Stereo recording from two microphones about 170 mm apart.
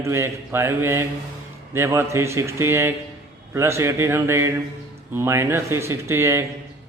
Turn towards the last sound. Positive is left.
turn(degrees=-15)  # may be behind; listen again after turning